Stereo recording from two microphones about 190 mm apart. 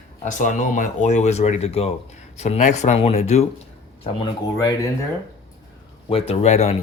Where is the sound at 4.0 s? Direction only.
25° left (ahead or behind).